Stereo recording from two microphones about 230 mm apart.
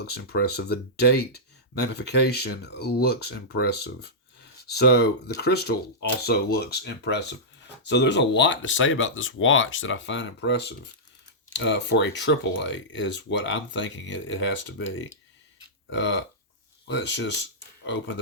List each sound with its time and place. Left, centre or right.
0.0 s speech: left